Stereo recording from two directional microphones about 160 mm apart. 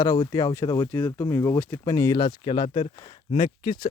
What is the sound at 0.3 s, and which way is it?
Speech, 20° left (ahead or behind).